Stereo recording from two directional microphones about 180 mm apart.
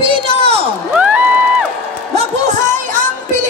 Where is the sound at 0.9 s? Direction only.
5° right (ahead or behind).